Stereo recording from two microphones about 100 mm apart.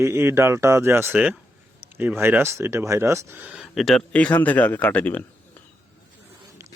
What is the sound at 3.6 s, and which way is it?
Speech, centre (ahead or behind).